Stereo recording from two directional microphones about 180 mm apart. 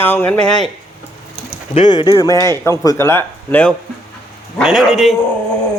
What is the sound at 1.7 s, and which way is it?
A man's voice, 25° left (ahead or behind).